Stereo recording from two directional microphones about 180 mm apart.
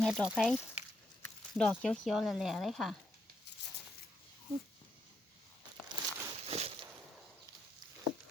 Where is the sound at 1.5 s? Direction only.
5° left (ahead or behind).